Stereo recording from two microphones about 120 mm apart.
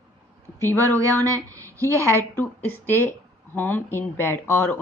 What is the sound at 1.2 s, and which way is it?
A woman's voice, 25° right (ahead or behind).